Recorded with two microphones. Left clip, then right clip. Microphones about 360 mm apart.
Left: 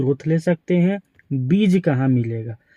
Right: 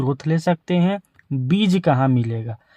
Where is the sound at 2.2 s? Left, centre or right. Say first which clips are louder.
Left 1 dB; centre.